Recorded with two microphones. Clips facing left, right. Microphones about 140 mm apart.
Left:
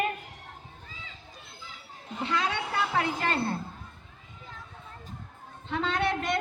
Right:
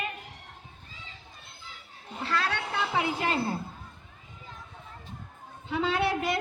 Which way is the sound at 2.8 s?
5° right (ahead or behind).